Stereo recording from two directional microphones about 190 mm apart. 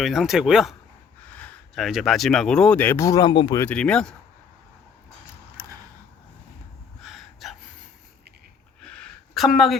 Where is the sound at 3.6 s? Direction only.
5° left (ahead or behind).